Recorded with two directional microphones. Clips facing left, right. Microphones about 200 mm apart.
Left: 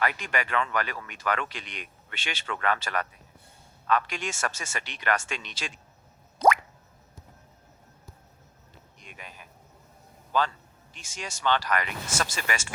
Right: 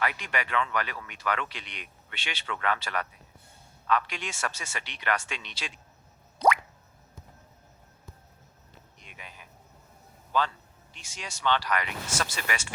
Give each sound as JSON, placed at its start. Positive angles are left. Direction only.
{"t": 0.0, "sound": "speech", "side_deg": 45}
{"t": 6.4, "sound": "music", "side_deg": 45}
{"t": 9.0, "sound": "insect", "side_deg": 45}
{"t": 10.3, "sound": "speech", "side_deg": 45}